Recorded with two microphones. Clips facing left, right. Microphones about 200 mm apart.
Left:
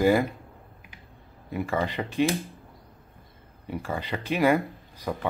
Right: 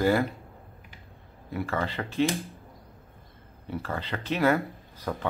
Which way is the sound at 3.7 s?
10° left (ahead or behind).